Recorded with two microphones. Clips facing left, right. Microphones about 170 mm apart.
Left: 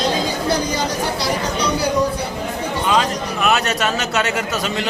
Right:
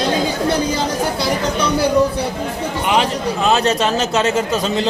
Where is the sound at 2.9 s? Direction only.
25° right (ahead or behind).